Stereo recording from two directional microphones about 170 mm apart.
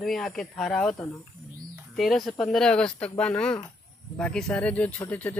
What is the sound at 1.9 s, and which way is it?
Speech, centre (ahead or behind).